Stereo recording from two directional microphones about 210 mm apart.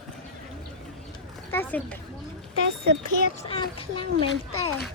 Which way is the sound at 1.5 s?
10° left (ahead or behind).